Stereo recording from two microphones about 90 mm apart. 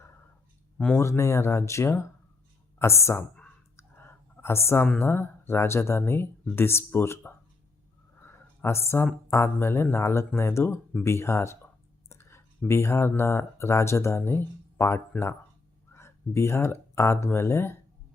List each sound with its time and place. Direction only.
0.9 s speech: 30° left (ahead or behind)
3.8 s clicking: 25° left (ahead or behind)
4.9 s speech: 25° left (ahead or behind)
8.2 s a sound: 25° left (ahead or behind)
9.3 s speech: 30° left (ahead or behind)